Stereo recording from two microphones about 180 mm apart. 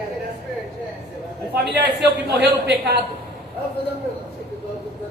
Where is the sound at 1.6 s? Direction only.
70° right (ahead or behind).